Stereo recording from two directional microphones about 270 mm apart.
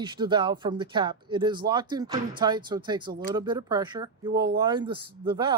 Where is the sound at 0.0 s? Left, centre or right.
Centre.